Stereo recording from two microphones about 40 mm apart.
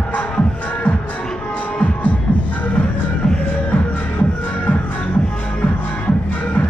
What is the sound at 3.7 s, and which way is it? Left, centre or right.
Music, left.